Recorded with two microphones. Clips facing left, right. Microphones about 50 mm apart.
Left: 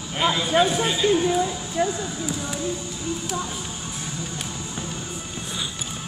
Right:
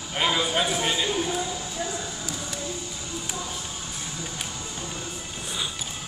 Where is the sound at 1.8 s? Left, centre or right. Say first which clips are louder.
Left 10 dB; left.